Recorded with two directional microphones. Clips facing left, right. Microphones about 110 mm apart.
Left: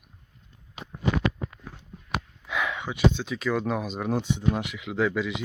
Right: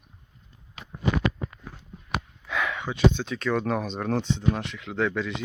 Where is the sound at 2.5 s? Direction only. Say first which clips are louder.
Right 1 dB; 15° left (ahead or behind).